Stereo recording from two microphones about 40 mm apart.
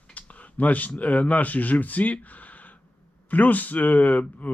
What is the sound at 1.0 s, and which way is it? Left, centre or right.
Speech, left.